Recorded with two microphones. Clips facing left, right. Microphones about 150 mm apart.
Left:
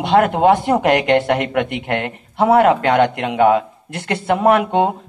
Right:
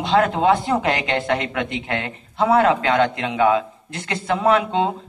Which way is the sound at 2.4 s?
40° left (ahead or behind).